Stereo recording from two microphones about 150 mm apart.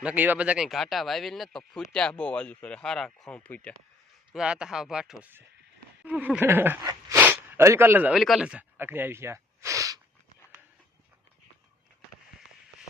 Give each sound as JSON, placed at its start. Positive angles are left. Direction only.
{"t": 0.0, "sound": "speech", "side_deg": -10}
{"t": 4.3, "sound": "speech", "side_deg": -5}
{"t": 5.2, "sound": "a sound", "side_deg": -15}
{"t": 7.2, "sound": "speech", "side_deg": -15}